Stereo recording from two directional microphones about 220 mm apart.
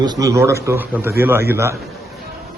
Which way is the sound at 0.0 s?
15° right (ahead or behind).